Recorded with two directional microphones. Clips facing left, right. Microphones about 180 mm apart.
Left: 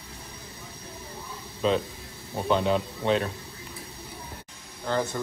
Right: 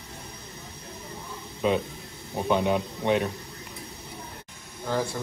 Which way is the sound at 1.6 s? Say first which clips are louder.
Even; 10° right (ahead or behind).